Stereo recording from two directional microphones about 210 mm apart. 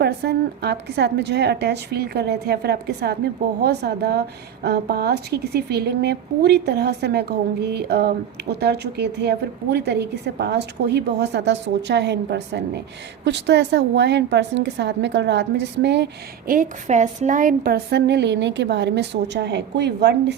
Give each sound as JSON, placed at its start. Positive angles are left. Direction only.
{"t": 0.0, "sound": "a woman's voice", "side_deg": -50}
{"t": 16.5, "sound": "a woman's voice", "side_deg": -35}